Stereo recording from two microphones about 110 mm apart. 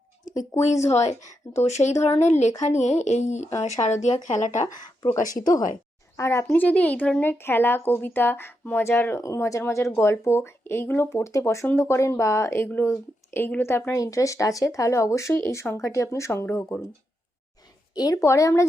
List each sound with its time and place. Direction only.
0.7 s speech: 30° left (ahead or behind)
1.5 s speech: 90° left
5.1 s a woman's voice: 35° left (ahead or behind)
6.5 s a woman's voice: 15° left (ahead or behind)
17.9 s a woman's voice: 35° left (ahead or behind)